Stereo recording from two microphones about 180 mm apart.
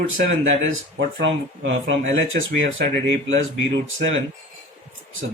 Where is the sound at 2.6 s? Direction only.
50° right (ahead or behind).